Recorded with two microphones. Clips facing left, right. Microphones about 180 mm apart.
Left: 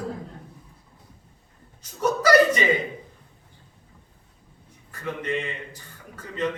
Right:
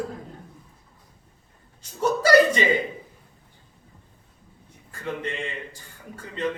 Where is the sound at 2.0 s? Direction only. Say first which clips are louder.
Right 1 dB; 30° right (ahead or behind).